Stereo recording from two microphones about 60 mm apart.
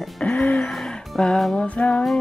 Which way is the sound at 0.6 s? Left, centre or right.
Centre.